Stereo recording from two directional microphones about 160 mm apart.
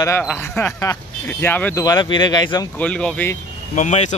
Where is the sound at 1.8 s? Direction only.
25° left (ahead or behind).